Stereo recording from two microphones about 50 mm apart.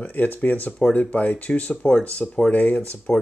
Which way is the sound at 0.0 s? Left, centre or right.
Left.